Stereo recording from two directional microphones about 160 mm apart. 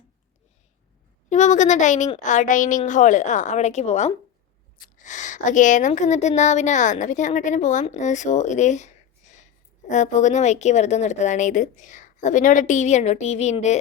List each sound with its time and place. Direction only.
1.3 s a woman's voice: 50° left (ahead or behind)